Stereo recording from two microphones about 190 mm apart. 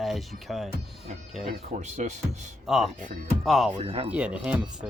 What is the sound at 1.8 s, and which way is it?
Speech, 40° right (ahead or behind).